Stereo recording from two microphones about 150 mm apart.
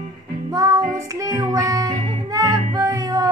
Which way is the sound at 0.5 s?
25° right (ahead or behind).